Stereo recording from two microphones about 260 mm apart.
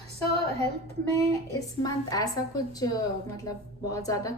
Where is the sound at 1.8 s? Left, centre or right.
Centre.